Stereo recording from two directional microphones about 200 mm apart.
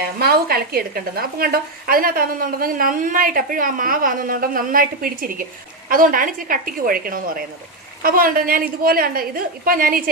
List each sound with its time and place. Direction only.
0.0 s a woman's voice: 50° right (ahead or behind)